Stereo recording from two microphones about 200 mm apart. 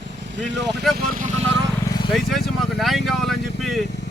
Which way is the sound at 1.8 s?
20° left (ahead or behind).